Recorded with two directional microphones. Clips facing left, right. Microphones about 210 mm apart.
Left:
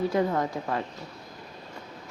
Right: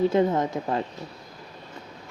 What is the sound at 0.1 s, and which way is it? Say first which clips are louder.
Speech: right 4 dB; 20° right (ahead or behind).